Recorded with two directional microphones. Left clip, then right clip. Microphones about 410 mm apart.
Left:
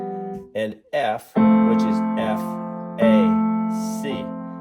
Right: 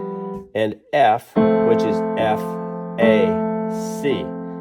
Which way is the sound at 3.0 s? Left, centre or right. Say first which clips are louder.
Right 3 dB; centre.